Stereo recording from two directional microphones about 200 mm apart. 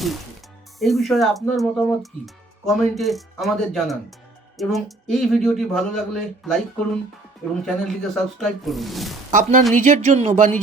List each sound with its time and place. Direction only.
0.8 s speech: centre (ahead or behind)
7.6 s speech: centre (ahead or behind)
9.3 s a sound: 40° right (ahead or behind)